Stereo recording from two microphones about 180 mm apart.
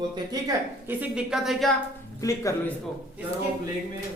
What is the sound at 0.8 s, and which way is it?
Speech, 5° right (ahead or behind).